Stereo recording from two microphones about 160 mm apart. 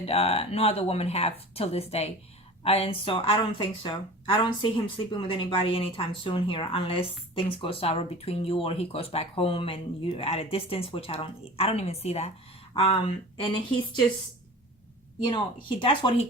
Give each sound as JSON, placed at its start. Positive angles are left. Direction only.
{"t": 0.0, "sound": "speech", "side_deg": 40}
{"t": 15.2, "sound": "speech", "side_deg": 30}